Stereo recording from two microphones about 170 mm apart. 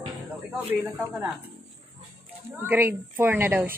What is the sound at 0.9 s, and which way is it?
Speech, 10° right (ahead or behind).